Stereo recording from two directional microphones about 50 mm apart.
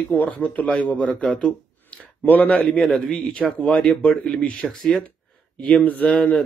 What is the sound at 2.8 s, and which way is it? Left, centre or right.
Speech, centre.